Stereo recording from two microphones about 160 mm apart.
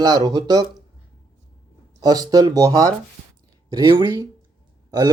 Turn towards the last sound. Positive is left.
turn(degrees=-25)  # may be behind; listen again after turning